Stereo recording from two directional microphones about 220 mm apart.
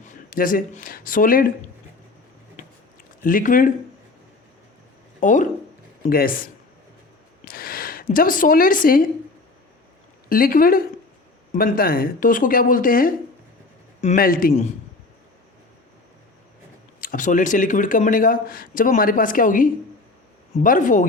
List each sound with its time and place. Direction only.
0.0 s speech: 40° left (ahead or behind)
3.2 s speech: 40° left (ahead or behind)
5.2 s speech: 35° left (ahead or behind)
7.4 s a sound: 40° left (ahead or behind)
10.2 s speech: 40° left (ahead or behind)
17.0 s speech: 40° left (ahead or behind)